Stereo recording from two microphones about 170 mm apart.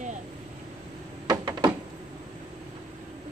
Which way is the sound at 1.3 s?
25° right (ahead or behind).